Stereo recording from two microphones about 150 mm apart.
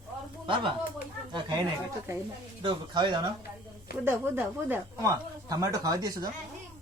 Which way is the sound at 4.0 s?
15° right (ahead or behind).